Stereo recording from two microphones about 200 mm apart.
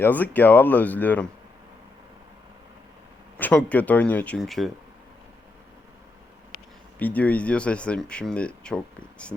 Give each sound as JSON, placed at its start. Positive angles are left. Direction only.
{"t": 0.0, "sound": "speech", "side_deg": 10}
{"t": 3.3, "sound": "speech", "side_deg": 10}
{"t": 7.0, "sound": "speech", "side_deg": 5}